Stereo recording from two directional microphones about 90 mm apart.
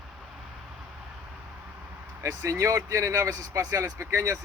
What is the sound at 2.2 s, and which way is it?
Speech, 35° right (ahead or behind).